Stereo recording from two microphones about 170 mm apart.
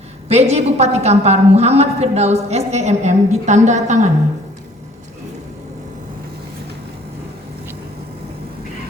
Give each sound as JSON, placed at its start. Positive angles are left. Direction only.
{"t": 0.3, "sound": "a woman's voice", "side_deg": -40}